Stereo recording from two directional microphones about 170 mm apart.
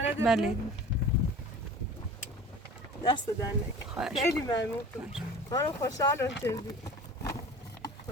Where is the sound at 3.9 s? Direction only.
5° right (ahead or behind).